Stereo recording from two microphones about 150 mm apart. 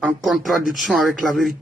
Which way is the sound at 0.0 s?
Centre (ahead or behind).